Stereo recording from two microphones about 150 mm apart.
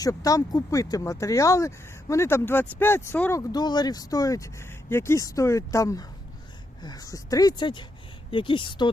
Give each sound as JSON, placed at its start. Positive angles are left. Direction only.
{"t": 0.0, "sound": "speech", "side_deg": 25}
{"t": 3.5, "sound": "speech", "side_deg": 30}